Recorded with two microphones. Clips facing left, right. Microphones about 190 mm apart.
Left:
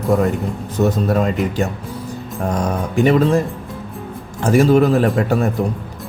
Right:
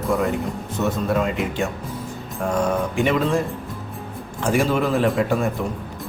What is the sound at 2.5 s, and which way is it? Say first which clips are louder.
Speech: left 1 dB; 40° left (ahead or behind).